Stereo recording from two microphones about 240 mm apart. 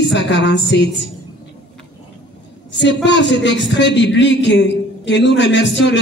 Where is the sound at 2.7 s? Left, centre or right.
Left.